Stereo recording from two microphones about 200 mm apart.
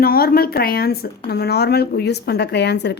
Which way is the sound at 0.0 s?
50° left (ahead or behind).